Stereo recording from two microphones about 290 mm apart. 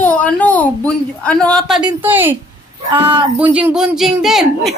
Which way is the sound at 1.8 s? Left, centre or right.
Centre.